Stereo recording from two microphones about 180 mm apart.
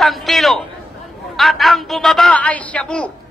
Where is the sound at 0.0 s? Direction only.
Centre (ahead or behind).